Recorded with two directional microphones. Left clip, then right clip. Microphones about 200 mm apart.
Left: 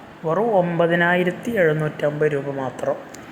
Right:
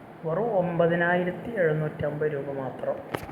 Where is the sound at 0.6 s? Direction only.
30° left (ahead or behind).